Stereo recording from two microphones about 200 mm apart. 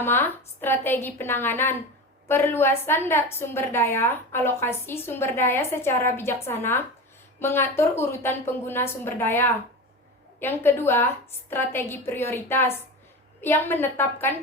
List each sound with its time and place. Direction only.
0.0 s a woman's voice: 10° left (ahead or behind)